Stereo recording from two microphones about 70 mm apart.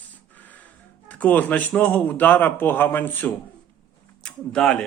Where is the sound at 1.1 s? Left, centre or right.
Left.